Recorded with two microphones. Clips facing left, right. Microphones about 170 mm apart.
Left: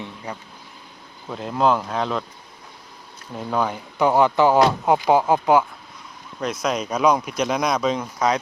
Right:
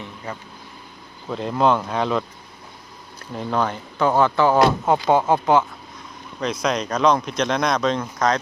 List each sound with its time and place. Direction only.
0.3 s speech: 15° left (ahead or behind)
1.3 s speech: 5° left (ahead or behind)
3.3 s speech: 5° left (ahead or behind)